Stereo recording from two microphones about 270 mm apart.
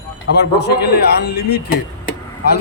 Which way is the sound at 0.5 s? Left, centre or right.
Left.